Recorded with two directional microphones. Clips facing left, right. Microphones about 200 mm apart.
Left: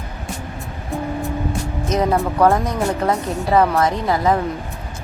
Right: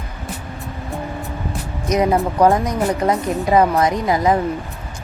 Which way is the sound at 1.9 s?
15° right (ahead or behind).